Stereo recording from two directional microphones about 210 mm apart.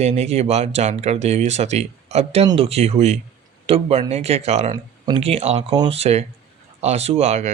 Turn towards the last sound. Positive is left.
turn(degrees=-30)  # may be behind; listen again after turning